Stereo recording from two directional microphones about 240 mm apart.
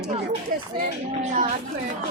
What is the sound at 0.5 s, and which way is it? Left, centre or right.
Speech, right.